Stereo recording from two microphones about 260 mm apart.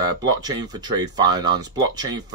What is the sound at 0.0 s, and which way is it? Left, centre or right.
Speech, centre.